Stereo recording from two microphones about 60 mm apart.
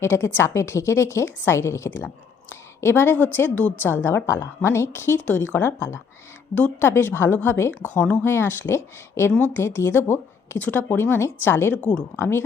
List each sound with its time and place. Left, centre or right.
0.0 s a woman's voice: left
2.5 s a sound: left
3.3 s speech: left
3.8 s a woman's voice: left
7.9 s a woman's voice: left
9.4 s speech: left
9.6 s speech: left
11.8 s speech: centre
12.1 s a woman's voice: left